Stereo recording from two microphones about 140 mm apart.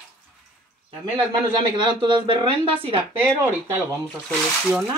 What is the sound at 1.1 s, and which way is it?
A woman's voice, 35° right (ahead or behind).